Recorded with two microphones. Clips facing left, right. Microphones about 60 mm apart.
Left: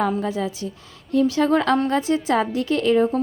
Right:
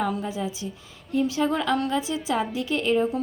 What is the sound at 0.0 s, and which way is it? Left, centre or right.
A woman's voice, left.